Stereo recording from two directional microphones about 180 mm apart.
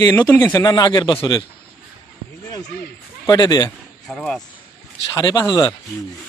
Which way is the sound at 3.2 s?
20° left (ahead or behind).